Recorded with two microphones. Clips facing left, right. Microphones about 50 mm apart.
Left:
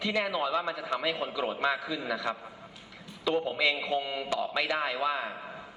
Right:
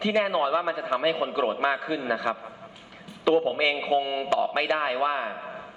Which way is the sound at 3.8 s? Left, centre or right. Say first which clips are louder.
Right 6 dB; right.